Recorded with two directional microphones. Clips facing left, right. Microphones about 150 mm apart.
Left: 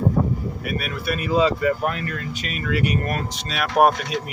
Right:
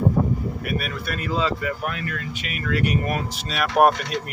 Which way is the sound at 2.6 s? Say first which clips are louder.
Even; 5° left (ahead or behind).